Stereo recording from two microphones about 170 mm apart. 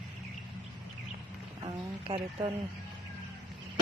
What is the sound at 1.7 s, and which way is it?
Speech, 30° right (ahead or behind).